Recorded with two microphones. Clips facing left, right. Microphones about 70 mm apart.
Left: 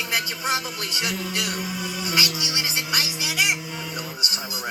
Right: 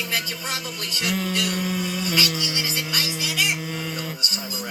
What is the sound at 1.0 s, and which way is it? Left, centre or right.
Music, centre.